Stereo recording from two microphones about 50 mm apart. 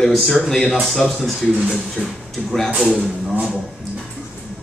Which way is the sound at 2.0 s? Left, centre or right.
Centre.